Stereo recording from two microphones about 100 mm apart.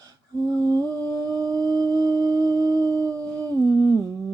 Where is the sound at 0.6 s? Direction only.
40° right (ahead or behind).